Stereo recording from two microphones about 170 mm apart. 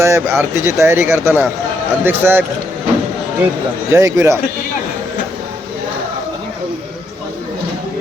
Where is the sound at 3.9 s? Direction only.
15° right (ahead or behind).